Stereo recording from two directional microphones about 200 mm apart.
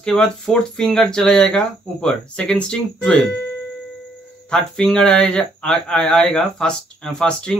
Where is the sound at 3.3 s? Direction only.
55° left (ahead or behind).